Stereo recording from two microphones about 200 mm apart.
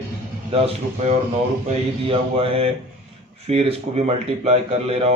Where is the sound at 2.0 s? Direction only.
30° right (ahead or behind).